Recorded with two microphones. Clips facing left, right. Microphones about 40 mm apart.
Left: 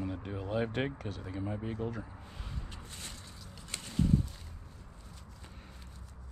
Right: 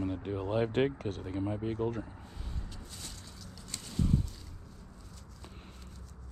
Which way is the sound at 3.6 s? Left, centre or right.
Left.